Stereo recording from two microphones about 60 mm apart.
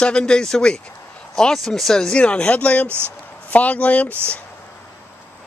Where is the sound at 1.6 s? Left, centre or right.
Centre; by 2.8 s left.